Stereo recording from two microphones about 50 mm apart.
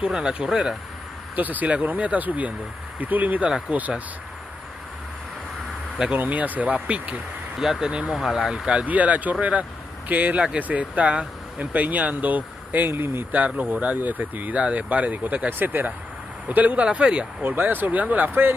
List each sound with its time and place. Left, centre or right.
0.0 s speech: centre
1.3 s speech: right
6.1 s speech: right
7.5 s speech: centre
7.9 s speech: right
13.3 s speech: right
17.4 s speech: right